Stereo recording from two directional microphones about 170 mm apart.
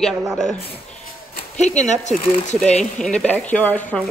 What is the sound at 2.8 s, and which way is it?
A woman's voice, 5° left (ahead or behind).